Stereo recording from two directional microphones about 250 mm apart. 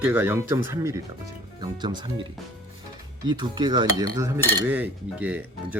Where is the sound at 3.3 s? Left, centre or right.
Centre.